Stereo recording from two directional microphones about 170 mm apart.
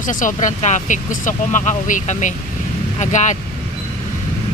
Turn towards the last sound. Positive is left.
turn(degrees=45)  # may be behind; listen again after turning